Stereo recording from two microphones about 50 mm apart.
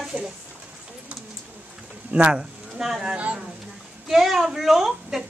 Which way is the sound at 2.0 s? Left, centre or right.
Right.